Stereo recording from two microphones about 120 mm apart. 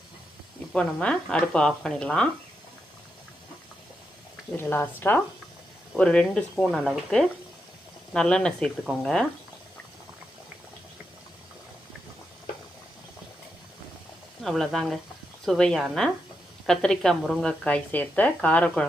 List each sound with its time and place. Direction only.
0.7 s speech: 10° left (ahead or behind)
4.5 s speech: 15° left (ahead or behind)
14.4 s speech: 5° left (ahead or behind)